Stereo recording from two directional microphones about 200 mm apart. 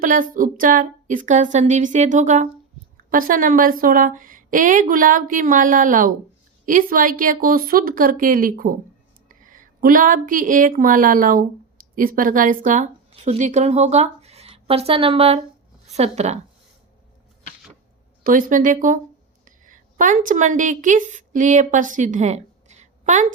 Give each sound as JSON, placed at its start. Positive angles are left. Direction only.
{"t": 0.0, "sound": "a woman's voice", "side_deg": -40}
{"t": 18.2, "sound": "a woman's voice", "side_deg": -45}